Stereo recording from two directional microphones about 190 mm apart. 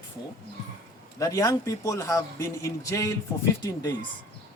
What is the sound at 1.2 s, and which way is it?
Speech, 20° left (ahead or behind).